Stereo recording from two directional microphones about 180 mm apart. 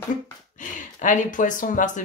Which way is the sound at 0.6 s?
45° left (ahead or behind).